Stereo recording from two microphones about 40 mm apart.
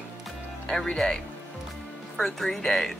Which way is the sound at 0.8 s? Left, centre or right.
Centre.